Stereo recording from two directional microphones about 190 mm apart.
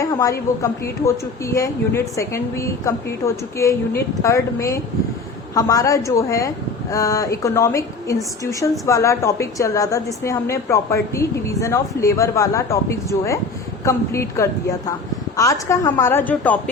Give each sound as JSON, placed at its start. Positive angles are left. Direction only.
{"t": 0.0, "sound": "a woman's voice", "side_deg": 15}